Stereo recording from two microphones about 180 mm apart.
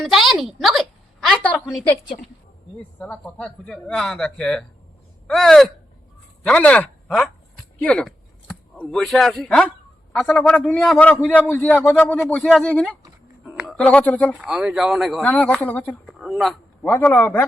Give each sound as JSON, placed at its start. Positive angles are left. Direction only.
{"t": 0.0, "sound": "a woman's voice", "side_deg": 0}
{"t": 3.0, "sound": "speech", "side_deg": 5}
{"t": 14.3, "sound": "speech", "side_deg": -5}
{"t": 16.8, "sound": "speech", "side_deg": 10}